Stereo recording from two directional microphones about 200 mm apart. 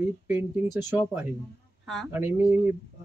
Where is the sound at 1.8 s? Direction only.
Centre (ahead or behind).